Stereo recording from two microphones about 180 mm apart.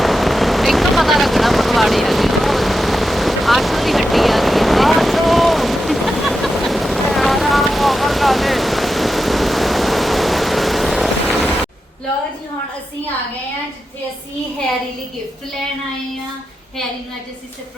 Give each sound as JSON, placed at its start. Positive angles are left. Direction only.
{"t": 0.0, "sound": "vehicle", "side_deg": 0}